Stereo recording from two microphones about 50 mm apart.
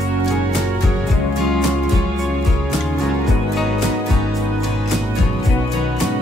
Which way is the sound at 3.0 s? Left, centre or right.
Centre.